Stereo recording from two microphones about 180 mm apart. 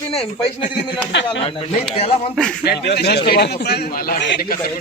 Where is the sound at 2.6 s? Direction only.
60° left (ahead or behind).